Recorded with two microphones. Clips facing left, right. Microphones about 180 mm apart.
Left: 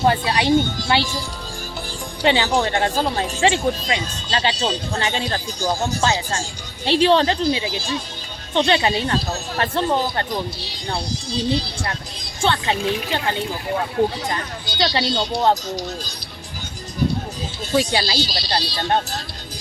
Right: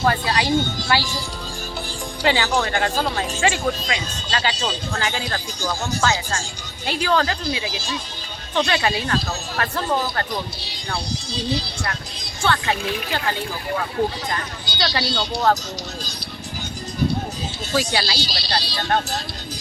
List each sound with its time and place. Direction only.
0.0 s speech: 25° left (ahead or behind)
2.2 s speech: 25° left (ahead or behind)
12.5 s speech: 20° left (ahead or behind)
17.7 s speech: 25° left (ahead or behind)